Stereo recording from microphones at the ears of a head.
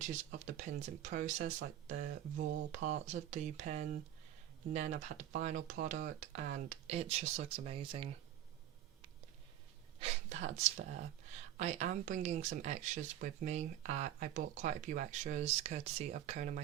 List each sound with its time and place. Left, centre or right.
0.0 s speech: right
10.0 s speech: right